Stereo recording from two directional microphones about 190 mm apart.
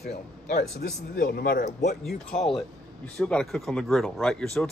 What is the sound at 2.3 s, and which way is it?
Speech, 40° left (ahead or behind).